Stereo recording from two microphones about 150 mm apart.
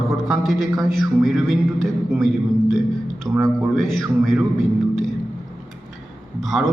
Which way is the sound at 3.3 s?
25° right (ahead or behind).